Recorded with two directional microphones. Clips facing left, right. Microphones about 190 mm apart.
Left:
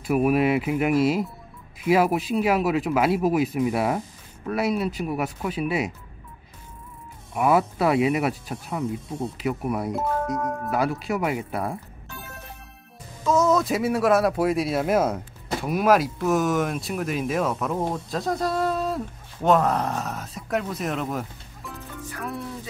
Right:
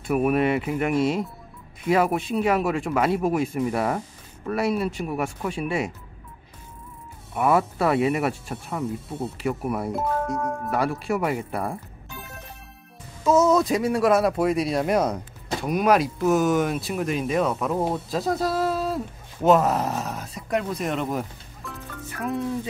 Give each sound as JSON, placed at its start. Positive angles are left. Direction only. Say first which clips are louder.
{"t": 0.0, "sound": "speech", "louder": "left 1 dB", "side_deg": 5}
{"t": 7.3, "sound": "speech", "louder": "even", "side_deg": 5}
{"t": 13.2, "sound": "speech", "louder": "right 2 dB", "side_deg": -5}